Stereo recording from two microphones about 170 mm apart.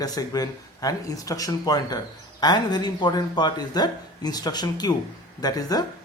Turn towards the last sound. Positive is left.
turn(degrees=20)  # may be behind; listen again after turning